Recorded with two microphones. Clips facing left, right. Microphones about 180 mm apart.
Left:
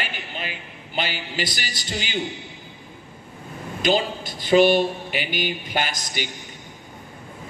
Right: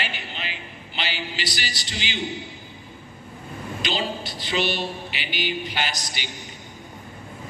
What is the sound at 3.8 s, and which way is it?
A man's voice, 50° left (ahead or behind).